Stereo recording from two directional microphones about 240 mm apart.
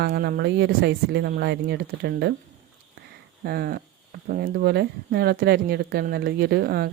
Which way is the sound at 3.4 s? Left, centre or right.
Right.